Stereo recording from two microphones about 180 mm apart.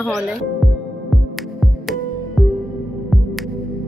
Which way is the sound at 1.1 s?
Centre (ahead or behind).